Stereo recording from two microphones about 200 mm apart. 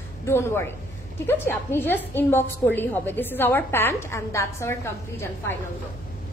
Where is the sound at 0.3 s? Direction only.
10° left (ahead or behind).